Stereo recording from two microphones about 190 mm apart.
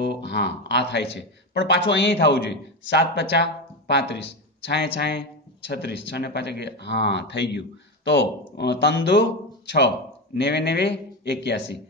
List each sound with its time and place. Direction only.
0.0 s speech: 60° left (ahead or behind)